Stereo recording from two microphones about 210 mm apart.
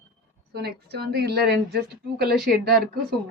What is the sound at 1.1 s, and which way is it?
A woman's voice, 50° right (ahead or behind).